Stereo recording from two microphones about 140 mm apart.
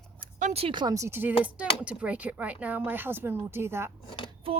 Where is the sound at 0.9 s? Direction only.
20° right (ahead or behind).